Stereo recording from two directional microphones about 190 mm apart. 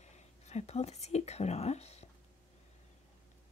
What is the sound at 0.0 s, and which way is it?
Speech, 35° left (ahead or behind).